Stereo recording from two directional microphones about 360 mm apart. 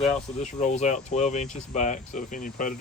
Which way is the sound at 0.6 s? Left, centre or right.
Centre.